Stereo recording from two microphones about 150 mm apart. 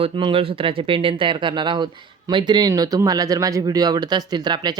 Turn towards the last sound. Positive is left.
turn(degrees=-30)  # may be behind; listen again after turning